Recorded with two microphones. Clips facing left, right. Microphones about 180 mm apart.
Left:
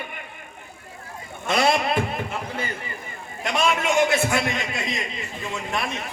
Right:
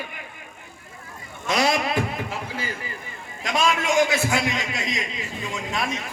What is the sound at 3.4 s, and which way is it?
A man's voice, 60° left (ahead or behind).